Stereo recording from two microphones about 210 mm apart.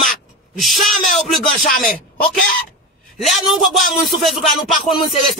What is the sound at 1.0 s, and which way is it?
Speech, centre (ahead or behind).